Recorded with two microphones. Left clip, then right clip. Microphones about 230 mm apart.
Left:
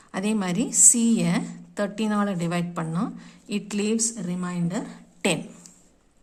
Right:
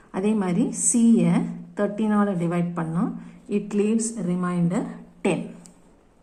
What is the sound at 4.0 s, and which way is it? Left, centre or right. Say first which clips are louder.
Speech: right 2 dB; left.